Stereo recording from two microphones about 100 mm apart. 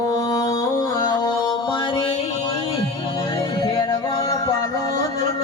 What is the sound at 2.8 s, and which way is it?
Music, 40° left (ahead or behind).